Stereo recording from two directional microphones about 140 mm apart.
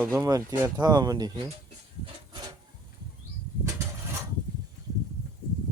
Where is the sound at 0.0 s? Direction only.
20° right (ahead or behind).